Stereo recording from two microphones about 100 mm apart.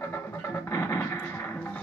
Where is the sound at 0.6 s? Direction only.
30° left (ahead or behind).